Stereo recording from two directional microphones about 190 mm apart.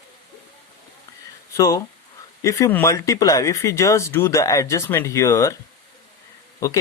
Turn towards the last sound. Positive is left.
turn(degrees=15)  # may be behind; listen again after turning